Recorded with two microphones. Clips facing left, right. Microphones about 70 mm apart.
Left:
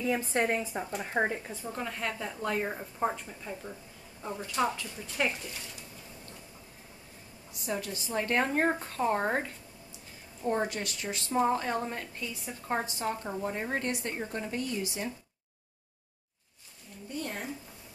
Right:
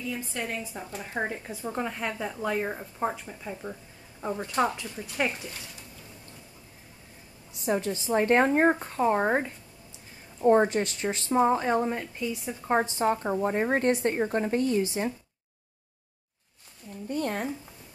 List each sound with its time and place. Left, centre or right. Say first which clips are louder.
0.0 s a woman's voice: left 5 dB; left
0.5 s speech: left 4 dB; left
1.3 s a woman's voice: right 3 dB; centre
4.2 s a woman's voice: right 4 dB; right
7.6 s a woman's voice: right 7 dB; right
10.4 s speech: right 10 dB; right
11.3 s a woman's voice: right 5 dB; centre
12.6 s speech: right 7 dB; right
17.1 s speech: right 7 dB; right